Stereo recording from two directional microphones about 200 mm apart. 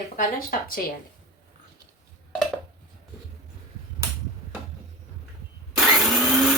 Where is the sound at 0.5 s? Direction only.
45° left (ahead or behind).